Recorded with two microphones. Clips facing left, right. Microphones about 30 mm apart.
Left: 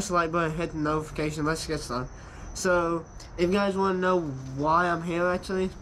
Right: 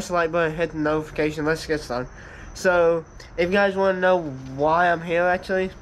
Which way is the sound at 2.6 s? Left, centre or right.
Right.